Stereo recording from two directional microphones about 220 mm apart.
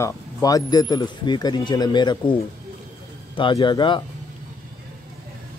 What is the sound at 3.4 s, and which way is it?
Speech, 20° left (ahead or behind).